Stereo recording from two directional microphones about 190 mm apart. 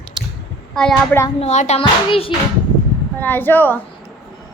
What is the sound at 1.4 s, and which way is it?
Speech, 35° left (ahead or behind).